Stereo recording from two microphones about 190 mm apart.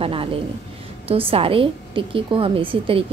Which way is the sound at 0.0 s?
30° right (ahead or behind).